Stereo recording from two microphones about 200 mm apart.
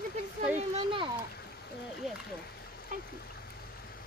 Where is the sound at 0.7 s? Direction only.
25° right (ahead or behind).